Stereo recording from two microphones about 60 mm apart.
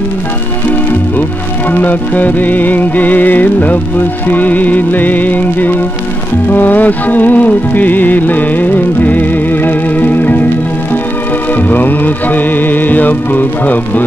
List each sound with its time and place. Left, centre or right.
1.7 s music: left
11.5 s music: left